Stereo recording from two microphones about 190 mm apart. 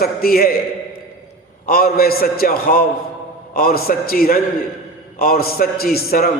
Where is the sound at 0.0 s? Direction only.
55° left (ahead or behind).